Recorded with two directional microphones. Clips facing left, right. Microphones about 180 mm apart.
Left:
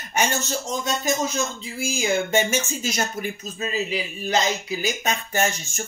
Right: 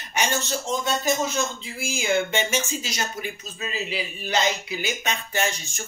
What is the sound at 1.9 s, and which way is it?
Speech, 40° left (ahead or behind).